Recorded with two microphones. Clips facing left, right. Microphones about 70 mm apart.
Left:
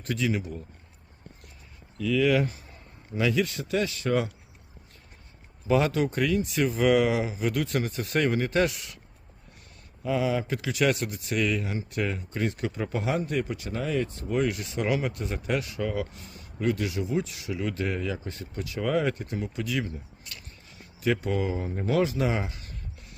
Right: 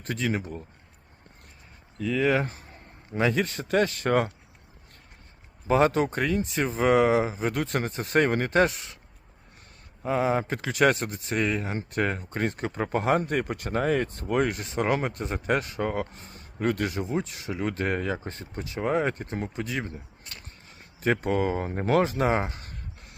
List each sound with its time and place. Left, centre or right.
0.0 s speech: right
2.0 s speech: right
5.6 s speech: right
10.0 s speech: right